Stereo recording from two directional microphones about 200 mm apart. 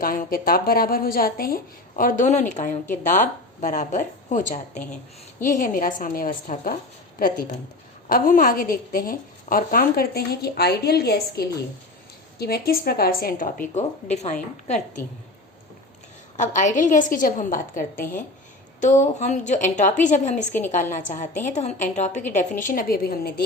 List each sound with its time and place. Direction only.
0.0 s a woman's voice: 45° left (ahead or behind)
16.4 s a woman's voice: 40° left (ahead or behind)